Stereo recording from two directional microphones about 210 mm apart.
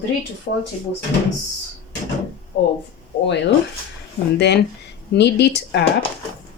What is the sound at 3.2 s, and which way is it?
Speech, 55° left (ahead or behind).